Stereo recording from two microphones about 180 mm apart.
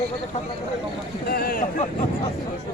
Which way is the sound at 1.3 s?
55° left (ahead or behind).